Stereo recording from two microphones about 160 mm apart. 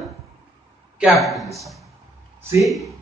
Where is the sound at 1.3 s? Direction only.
Centre (ahead or behind).